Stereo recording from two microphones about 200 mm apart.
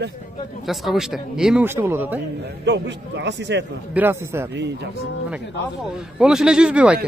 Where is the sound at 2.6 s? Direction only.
60° right (ahead or behind).